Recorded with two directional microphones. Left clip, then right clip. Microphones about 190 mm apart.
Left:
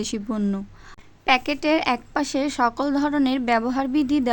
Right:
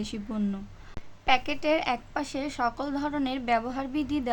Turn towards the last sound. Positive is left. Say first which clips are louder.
# left 8 dB
turn(degrees=35)  # may be behind; listen again after turning